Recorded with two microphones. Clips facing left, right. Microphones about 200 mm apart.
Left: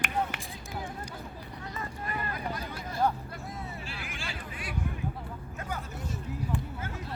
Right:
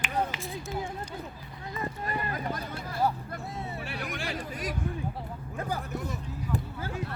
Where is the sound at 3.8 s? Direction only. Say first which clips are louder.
Right 6 dB; 60° right (ahead or behind).